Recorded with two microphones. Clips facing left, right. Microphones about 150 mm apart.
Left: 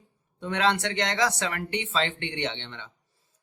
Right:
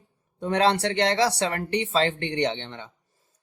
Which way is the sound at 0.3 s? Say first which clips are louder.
Right 4 dB; 40° right (ahead or behind).